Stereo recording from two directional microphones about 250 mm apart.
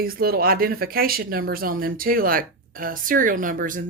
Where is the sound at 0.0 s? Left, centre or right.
Right.